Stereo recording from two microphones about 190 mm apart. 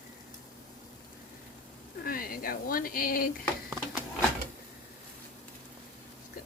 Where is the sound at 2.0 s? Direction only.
50° left (ahead or behind).